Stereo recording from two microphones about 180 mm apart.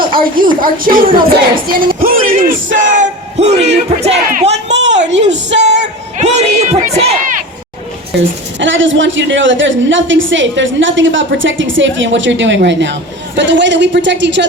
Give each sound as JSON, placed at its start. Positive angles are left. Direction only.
{"t": 0.6, "sound": "speech", "side_deg": -50}
{"t": 4.8, "sound": "a sound", "side_deg": -40}
{"t": 5.1, "sound": "speech", "side_deg": -85}
{"t": 5.8, "sound": "speech", "side_deg": -40}
{"t": 8.1, "sound": "speech", "side_deg": -80}
{"t": 8.5, "sound": "a man's voice", "side_deg": -90}